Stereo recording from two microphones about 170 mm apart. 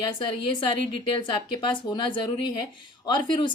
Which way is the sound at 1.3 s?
25° left (ahead or behind).